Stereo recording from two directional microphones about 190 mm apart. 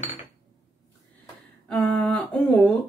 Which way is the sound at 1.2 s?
5° left (ahead or behind).